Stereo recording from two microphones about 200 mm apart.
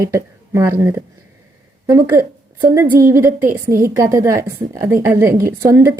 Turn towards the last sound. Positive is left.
turn(degrees=-15)  # may be behind; listen again after turning